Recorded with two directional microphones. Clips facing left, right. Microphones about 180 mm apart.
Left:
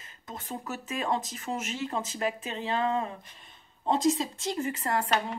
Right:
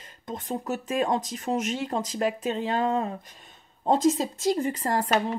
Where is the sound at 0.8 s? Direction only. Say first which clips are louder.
Right 4 dB; 45° right (ahead or behind).